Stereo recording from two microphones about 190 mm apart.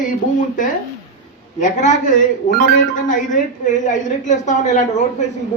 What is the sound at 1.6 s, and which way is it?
A woman's voice, 40° left (ahead or behind).